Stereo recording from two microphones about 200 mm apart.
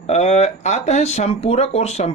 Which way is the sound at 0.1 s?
35° left (ahead or behind).